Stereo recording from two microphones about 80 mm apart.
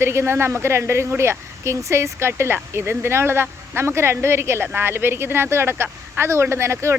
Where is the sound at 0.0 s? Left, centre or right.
Right.